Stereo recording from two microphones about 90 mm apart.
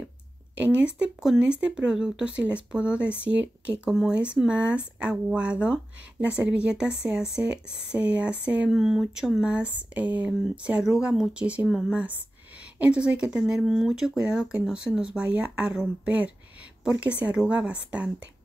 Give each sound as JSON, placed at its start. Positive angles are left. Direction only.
{"t": 0.6, "sound": "speech", "side_deg": -15}
{"t": 3.9, "sound": "speech", "side_deg": 0}
{"t": 4.2, "sound": "speech", "side_deg": -10}
{"t": 8.6, "sound": "speech", "side_deg": -5}